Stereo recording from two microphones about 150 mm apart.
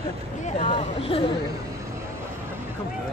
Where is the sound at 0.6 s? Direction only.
40° left (ahead or behind).